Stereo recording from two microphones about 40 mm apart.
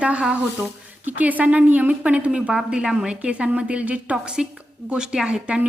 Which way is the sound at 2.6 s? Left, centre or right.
Centre.